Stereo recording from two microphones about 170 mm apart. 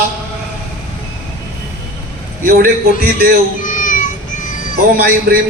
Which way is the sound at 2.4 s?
60° right (ahead or behind).